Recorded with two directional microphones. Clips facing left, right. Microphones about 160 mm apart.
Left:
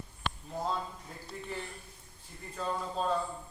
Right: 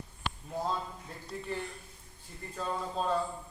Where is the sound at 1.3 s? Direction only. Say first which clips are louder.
Right 3 dB; centre (ahead or behind).